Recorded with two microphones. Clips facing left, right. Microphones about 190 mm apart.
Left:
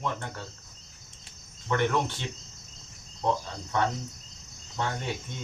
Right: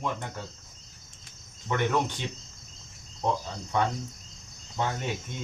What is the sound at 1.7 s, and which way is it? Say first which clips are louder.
Speech: left 2 dB; 15° right (ahead or behind).